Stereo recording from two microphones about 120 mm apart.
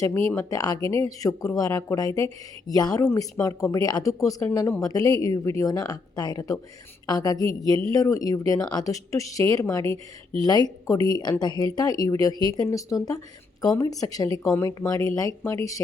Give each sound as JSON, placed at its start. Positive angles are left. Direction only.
{"t": 0.0, "sound": "speech", "side_deg": 25}
{"t": 3.0, "sound": "speech", "side_deg": 20}
{"t": 4.8, "sound": "speech", "side_deg": 30}